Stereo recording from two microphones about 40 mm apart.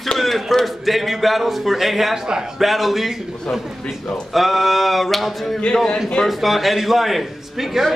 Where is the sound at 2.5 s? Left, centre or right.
Centre.